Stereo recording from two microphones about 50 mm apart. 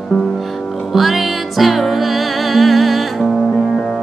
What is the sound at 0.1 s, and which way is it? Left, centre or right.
Music, centre.